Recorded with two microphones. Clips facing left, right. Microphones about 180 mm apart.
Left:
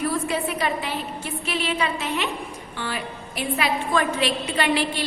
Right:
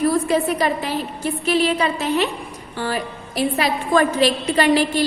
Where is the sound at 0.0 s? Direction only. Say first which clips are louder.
Right 7 dB; 40° right (ahead or behind).